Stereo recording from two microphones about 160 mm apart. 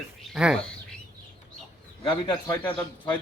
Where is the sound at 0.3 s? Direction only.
5° right (ahead or behind).